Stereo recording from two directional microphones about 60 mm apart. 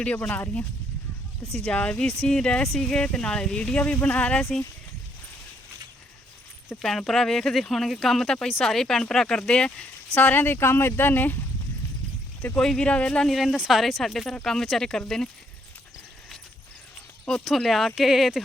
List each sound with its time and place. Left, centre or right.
0.0 s speech: left
1.6 s speech: centre
7.0 s speech: centre
10.2 s speech: left
12.5 s speech: centre
13.2 s speech: centre
17.2 s speech: centre